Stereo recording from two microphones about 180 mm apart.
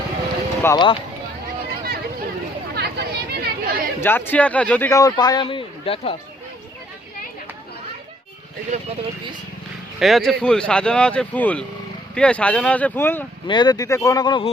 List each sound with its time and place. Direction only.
0.6 s speech: 20° left (ahead or behind)
2.7 s chatter: 65° right (ahead or behind)
4.0 s a man's voice: 10° left (ahead or behind); by 6.1 s 30° left (ahead or behind)
8.7 s speech: 35° right (ahead or behind)
10.0 s a man's voice: centre (ahead or behind)
13.5 s speech: 25° left (ahead or behind)